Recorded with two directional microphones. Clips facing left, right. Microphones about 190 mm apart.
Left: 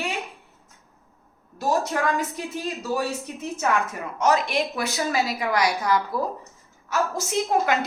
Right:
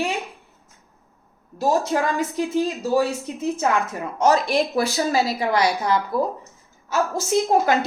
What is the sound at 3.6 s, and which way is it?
Speech, 30° right (ahead or behind).